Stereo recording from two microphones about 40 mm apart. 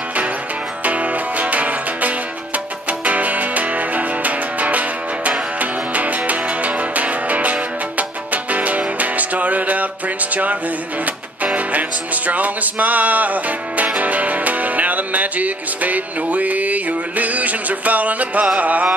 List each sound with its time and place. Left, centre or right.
0.8 s music: right